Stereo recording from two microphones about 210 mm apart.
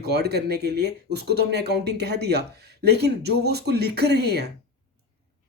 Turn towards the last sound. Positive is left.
turn(degrees=-50)  # may be behind; listen again after turning